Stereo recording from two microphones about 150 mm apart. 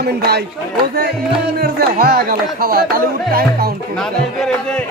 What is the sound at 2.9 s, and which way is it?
Music, 75° right (ahead or behind).